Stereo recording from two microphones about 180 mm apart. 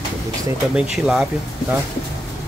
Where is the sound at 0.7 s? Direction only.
5° right (ahead or behind).